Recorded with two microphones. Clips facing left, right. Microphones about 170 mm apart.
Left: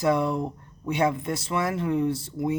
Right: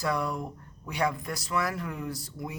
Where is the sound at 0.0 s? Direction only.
25° left (ahead or behind).